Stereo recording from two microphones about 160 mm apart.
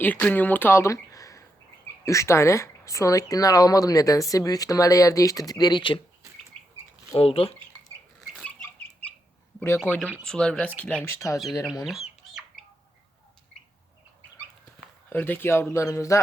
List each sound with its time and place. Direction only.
0.0 s speech: 10° left (ahead or behind); by 6.0 s 30° left (ahead or behind)
7.2 s speech: 35° left (ahead or behind)
8.4 s chicken: 10° left (ahead or behind)
9.6 s speech: 15° left (ahead or behind)
11.9 s chicken: centre (ahead or behind)
15.1 s speech: 10° left (ahead or behind)